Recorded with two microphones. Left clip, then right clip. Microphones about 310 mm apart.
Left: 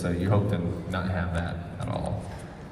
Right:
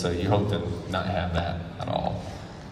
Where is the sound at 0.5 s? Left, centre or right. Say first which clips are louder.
Right 2 dB; centre.